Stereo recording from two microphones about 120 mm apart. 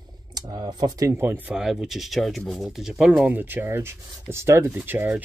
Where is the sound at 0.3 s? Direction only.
30° right (ahead or behind).